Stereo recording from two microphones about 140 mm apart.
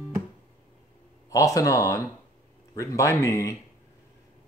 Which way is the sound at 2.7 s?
20° left (ahead or behind).